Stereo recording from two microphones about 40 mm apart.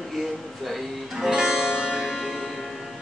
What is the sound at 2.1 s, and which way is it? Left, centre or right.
Music, centre.